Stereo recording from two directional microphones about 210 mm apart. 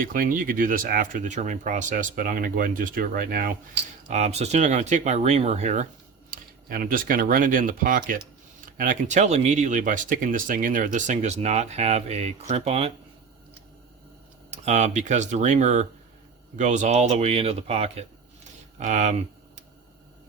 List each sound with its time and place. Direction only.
0.0 s speech: 40° right (ahead or behind)
4.1 s speech: 30° right (ahead or behind)
14.5 s speech: 30° right (ahead or behind)